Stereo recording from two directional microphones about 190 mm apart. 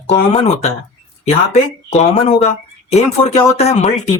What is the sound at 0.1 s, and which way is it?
Speech, 35° left (ahead or behind).